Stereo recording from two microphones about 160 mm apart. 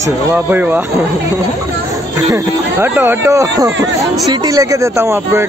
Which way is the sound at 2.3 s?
15° right (ahead or behind).